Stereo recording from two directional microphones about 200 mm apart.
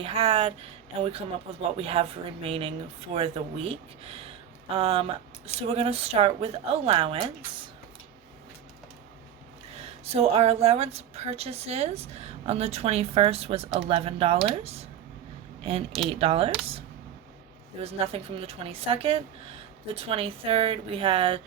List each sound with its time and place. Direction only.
0.0 s speech: 25° right (ahead or behind)
9.7 s speech: 30° right (ahead or behind)
16.1 s speech: 30° right (ahead or behind)
17.8 s speech: 30° right (ahead or behind)